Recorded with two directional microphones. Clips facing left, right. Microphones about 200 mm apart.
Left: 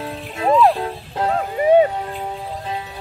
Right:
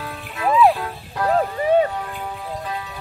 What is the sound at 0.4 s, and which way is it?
Music, 25° left (ahead or behind).